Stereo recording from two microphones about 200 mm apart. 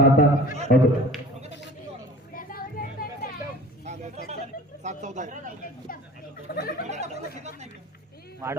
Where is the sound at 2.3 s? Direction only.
45° left (ahead or behind).